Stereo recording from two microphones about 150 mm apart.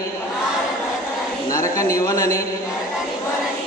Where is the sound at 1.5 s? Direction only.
20° left (ahead or behind).